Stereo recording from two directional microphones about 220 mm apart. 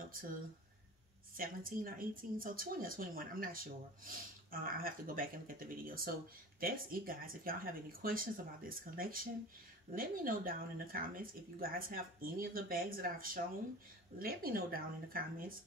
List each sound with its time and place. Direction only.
1.3 s a woman's voice: 40° right (ahead or behind)